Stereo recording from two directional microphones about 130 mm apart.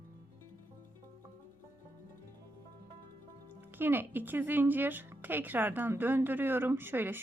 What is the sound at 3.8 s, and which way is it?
Speech, 15° right (ahead or behind).